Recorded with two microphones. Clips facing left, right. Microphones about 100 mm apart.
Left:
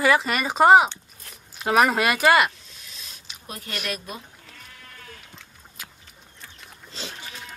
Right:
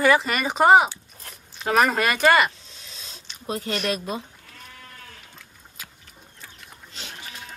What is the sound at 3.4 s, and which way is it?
Speech, 25° right (ahead or behind).